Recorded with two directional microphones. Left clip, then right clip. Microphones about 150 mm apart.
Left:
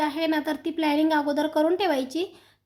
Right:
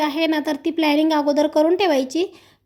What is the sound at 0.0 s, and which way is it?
A woman's voice, 35° right (ahead or behind).